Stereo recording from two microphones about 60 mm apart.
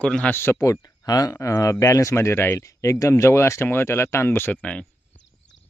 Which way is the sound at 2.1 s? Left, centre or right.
Left.